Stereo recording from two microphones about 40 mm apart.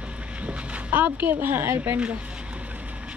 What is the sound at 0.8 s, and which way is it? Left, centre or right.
Speech, right.